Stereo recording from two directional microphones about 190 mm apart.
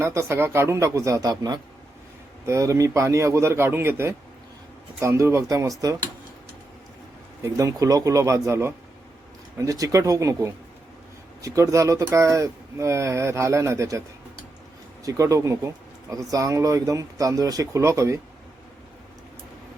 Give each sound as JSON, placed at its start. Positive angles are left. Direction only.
{"t": 0.0, "sound": "speech", "side_deg": -15}
{"t": 7.4, "sound": "speech", "side_deg": -15}
{"t": 15.0, "sound": "speech", "side_deg": -15}